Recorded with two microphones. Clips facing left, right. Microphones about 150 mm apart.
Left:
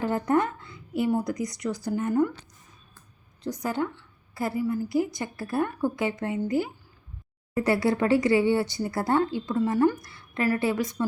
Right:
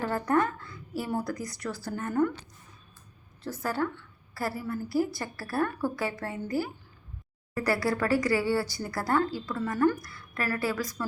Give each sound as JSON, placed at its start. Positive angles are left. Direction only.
{"t": 0.0, "sound": "a sound", "side_deg": 20}
{"t": 1.1, "sound": "speech", "side_deg": 20}
{"t": 3.4, "sound": "speech", "side_deg": 15}